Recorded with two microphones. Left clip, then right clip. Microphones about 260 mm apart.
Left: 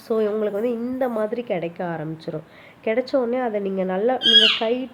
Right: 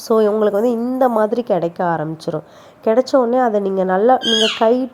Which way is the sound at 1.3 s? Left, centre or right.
Right.